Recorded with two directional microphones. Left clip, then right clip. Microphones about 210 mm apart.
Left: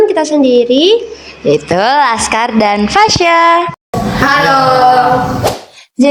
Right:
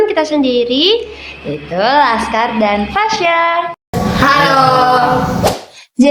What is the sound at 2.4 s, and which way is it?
A woman's voice, 45° left (ahead or behind).